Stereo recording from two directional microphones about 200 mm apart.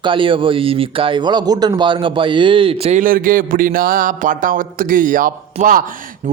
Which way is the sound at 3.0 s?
45° right (ahead or behind).